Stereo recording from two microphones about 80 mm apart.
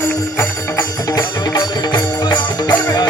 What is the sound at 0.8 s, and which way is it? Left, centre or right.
Music, left.